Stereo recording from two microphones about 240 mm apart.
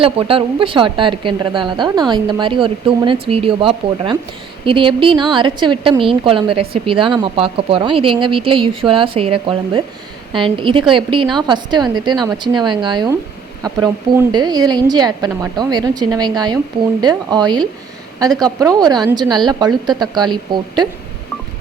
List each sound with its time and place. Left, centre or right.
0.0 s a woman's voice: right